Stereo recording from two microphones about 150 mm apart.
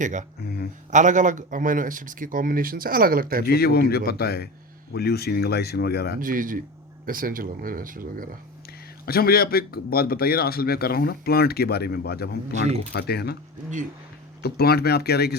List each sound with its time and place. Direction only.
0.0 s speech: 55° right (ahead or behind)
0.4 s a sound: 90° left
0.9 s speech: 55° right (ahead or behind); by 3.4 s 75° right (ahead or behind)
3.4 s speech: 90° left
6.1 s speech: 65° right (ahead or behind)
9.0 s speech: 90° left
14.4 s speech: 90° left